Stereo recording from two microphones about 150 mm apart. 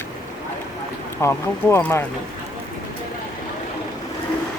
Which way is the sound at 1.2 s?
15° left (ahead or behind).